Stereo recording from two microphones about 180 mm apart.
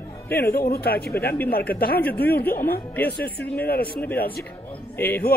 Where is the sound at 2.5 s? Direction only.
55° left (ahead or behind).